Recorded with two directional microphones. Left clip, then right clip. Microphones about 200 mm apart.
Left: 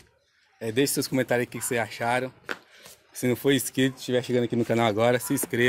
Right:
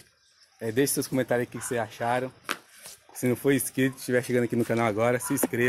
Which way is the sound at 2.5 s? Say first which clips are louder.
Right 1 dB; 40° right (ahead or behind).